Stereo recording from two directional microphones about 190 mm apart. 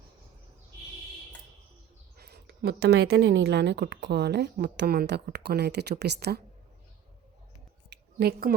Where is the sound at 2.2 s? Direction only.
55° right (ahead or behind).